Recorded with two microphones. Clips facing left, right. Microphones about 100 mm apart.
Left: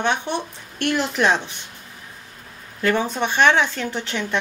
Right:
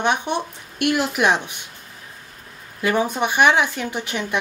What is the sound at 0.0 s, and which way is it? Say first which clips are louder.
Speech: right 1 dB; 15° right (ahead or behind).